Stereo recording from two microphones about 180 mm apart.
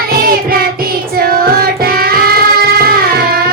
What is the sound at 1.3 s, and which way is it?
Music, 55° right (ahead or behind).